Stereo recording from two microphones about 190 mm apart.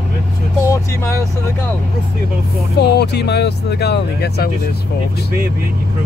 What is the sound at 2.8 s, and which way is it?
Speech, 60° left (ahead or behind).